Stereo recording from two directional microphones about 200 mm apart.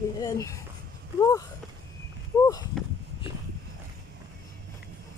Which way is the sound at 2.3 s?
15° left (ahead or behind).